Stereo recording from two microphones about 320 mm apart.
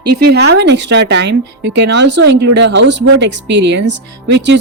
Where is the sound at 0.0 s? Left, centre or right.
Right.